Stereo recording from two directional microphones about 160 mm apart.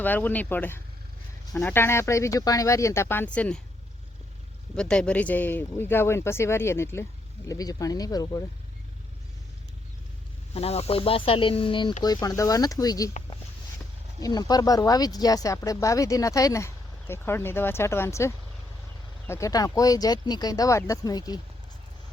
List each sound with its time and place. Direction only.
0.0 s speech: 10° left (ahead or behind)
4.8 s speech: 5° left (ahead or behind); by 8.4 s 25° left (ahead or behind)
10.5 s speech: 40° left (ahead or behind); by 13.1 s 20° left (ahead or behind)
14.2 s speech: 25° left (ahead or behind)